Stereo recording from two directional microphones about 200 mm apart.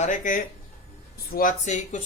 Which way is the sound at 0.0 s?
40° left (ahead or behind).